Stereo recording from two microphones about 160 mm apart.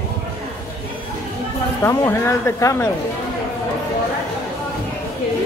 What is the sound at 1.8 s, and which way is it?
Speech, 15° left (ahead or behind).